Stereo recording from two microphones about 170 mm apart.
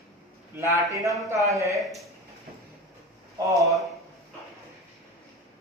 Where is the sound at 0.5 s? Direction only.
15° right (ahead or behind).